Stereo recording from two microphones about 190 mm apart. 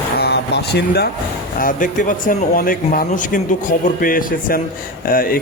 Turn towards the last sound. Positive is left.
turn(degrees=50)  # may be behind; listen again after turning